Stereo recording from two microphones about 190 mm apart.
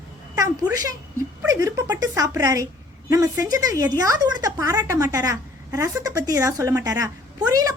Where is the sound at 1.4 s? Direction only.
15° right (ahead or behind).